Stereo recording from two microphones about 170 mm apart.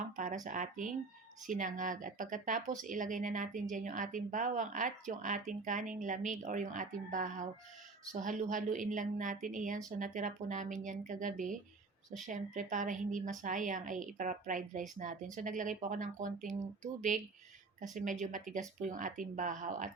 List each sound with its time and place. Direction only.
0.2 s speech: 50° right (ahead or behind)